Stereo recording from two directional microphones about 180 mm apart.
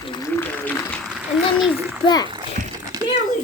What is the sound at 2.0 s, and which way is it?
Speech, 25° left (ahead or behind).